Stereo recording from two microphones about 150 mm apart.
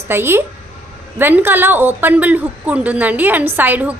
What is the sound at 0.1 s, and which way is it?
A woman's voice, 15° right (ahead or behind).